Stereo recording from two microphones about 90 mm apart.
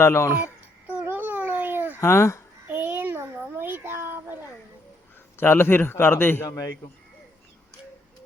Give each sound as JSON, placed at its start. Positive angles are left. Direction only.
{"t": 0.0, "sound": "a man's voice", "side_deg": 30}
{"t": 0.3, "sound": "babbling", "side_deg": -15}
{"t": 2.0, "sound": "speech", "side_deg": 30}
{"t": 2.6, "sound": "a sound", "side_deg": -20}
{"t": 5.4, "sound": "a man's voice", "side_deg": 25}